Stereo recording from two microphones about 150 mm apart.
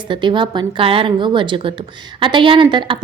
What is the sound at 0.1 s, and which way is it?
A woman's voice, 30° right (ahead or behind).